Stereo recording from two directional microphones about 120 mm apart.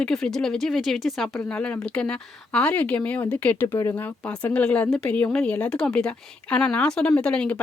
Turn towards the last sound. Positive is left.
turn(degrees=10)  # may be behind; listen again after turning